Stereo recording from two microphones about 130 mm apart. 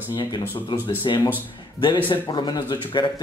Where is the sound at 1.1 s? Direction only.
35° left (ahead or behind).